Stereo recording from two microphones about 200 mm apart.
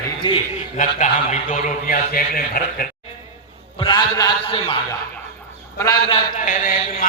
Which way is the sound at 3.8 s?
20° left (ahead or behind).